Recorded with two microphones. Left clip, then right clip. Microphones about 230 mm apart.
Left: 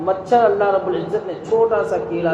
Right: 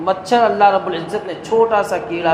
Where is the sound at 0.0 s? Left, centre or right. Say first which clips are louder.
Right 1 dB; right.